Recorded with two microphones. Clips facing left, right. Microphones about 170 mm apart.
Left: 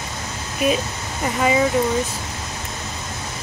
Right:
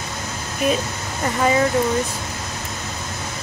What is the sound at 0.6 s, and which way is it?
Speech, 5° left (ahead or behind).